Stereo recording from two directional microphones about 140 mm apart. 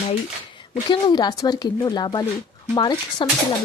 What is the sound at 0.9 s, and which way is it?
Speech, 30° left (ahead or behind).